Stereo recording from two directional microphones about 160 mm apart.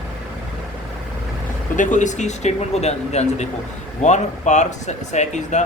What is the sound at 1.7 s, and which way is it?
Speech, 50° left (ahead or behind).